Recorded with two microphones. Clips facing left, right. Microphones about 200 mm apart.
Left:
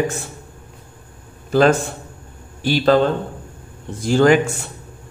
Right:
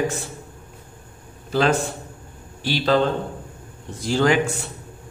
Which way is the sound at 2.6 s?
50° left (ahead or behind).